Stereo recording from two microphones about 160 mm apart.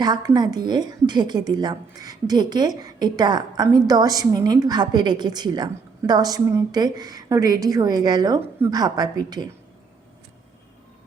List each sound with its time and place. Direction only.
0.0 s a woman's voice: 25° right (ahead or behind)